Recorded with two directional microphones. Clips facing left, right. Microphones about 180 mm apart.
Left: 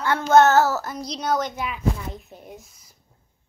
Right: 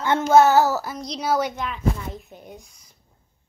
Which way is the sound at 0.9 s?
Centre (ahead or behind).